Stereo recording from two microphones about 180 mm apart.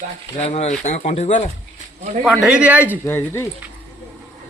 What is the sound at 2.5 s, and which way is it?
Speech, 10° right (ahead or behind).